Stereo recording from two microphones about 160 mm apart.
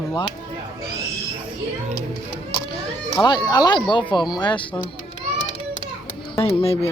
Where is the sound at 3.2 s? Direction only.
25° left (ahead or behind).